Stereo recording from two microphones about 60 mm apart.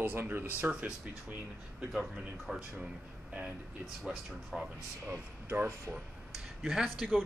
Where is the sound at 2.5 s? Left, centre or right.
Centre.